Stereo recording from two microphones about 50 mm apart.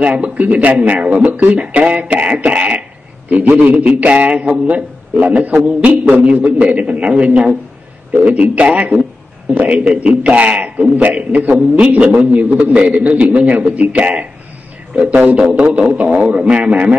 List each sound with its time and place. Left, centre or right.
0.0 s a man's voice: right